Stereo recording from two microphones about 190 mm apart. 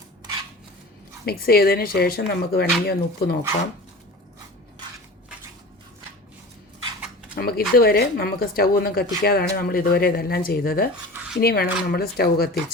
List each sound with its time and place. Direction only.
1.2 s speech: 55° left (ahead or behind)
7.3 s speech: 55° left (ahead or behind)